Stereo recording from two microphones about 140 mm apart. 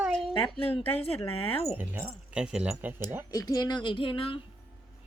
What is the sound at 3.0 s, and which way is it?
Speech, 15° right (ahead or behind).